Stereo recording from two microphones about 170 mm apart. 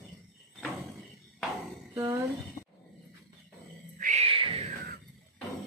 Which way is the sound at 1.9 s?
15° right (ahead or behind).